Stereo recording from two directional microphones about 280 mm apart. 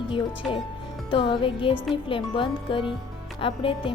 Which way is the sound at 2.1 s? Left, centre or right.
Centre.